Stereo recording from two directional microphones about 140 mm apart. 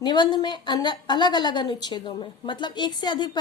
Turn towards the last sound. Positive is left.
turn(degrees=30)  # may be behind; listen again after turning